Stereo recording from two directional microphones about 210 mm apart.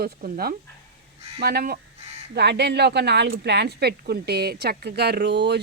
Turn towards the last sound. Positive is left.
turn(degrees=-55)  # may be behind; listen again after turning